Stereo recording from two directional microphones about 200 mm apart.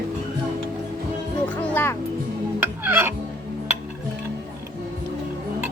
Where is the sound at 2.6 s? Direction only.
10° right (ahead or behind).